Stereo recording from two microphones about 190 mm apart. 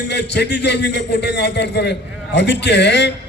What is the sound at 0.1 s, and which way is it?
A man's voice, 65° left (ahead or behind).